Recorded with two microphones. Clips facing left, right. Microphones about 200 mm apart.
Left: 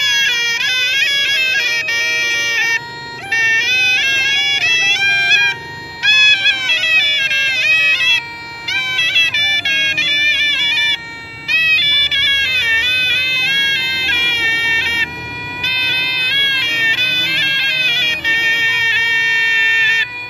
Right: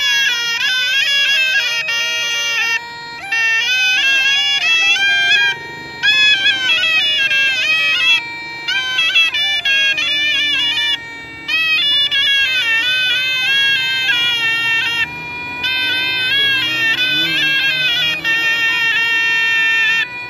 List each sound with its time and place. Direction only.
0.0 s music: 15° left (ahead or behind)